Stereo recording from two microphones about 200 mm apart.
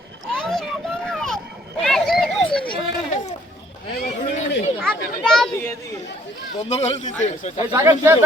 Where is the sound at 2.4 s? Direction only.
5° left (ahead or behind).